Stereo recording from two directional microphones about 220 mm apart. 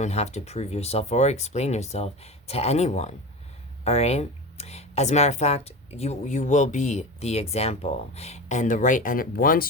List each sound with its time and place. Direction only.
0.0 s speech: 30° left (ahead or behind)